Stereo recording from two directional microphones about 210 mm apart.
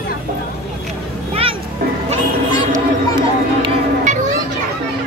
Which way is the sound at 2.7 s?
20° right (ahead or behind).